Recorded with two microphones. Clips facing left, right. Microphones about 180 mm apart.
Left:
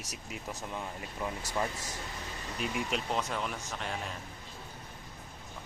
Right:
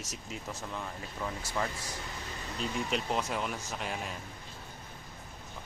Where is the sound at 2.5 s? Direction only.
10° left (ahead or behind).